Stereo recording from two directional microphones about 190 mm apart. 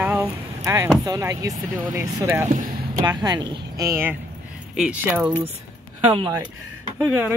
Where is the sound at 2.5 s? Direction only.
45° right (ahead or behind).